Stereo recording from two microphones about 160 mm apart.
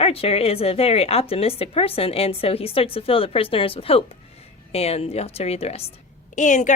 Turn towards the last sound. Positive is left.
turn(degrees=50)  # may be behind; listen again after turning